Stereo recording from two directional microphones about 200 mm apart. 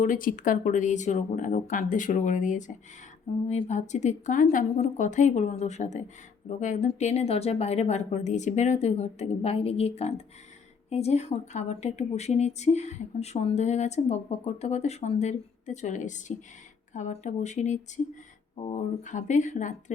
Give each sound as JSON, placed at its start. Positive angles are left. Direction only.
{"t": 0.0, "sound": "speech", "side_deg": 40}